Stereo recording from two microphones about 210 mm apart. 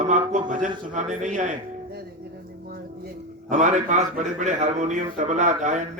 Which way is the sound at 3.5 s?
35° right (ahead or behind).